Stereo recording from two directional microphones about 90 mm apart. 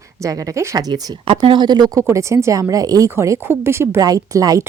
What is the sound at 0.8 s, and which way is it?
Speech, 45° right (ahead or behind).